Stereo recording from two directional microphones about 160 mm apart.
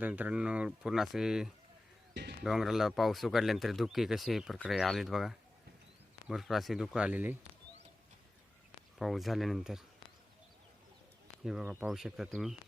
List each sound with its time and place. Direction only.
0.0 s speech: 10° right (ahead or behind)
9.0 s speech: centre (ahead or behind)
11.4 s speech: 5° right (ahead or behind)